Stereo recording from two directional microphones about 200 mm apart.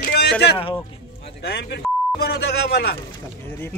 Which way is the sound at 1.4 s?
55° left (ahead or behind).